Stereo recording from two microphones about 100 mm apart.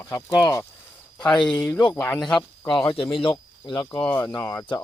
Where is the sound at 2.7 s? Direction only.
55° left (ahead or behind).